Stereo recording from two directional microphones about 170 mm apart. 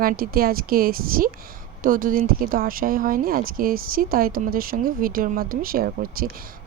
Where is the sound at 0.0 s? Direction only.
60° right (ahead or behind).